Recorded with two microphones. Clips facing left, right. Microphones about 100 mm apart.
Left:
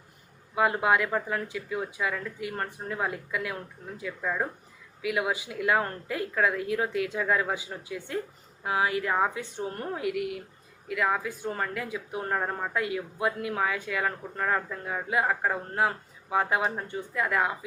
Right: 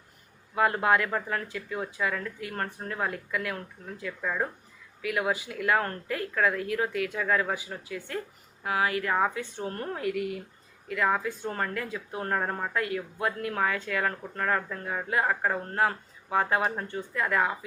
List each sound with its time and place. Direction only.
0.5 s speech: 10° left (ahead or behind)